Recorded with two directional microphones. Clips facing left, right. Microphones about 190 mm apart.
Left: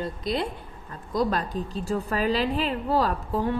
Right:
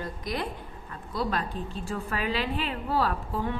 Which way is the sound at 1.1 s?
40° left (ahead or behind).